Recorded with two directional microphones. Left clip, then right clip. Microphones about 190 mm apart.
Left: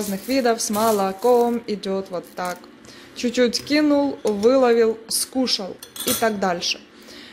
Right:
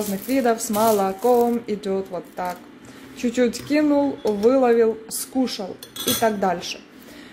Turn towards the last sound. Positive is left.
turn(degrees=10)  # may be behind; listen again after turning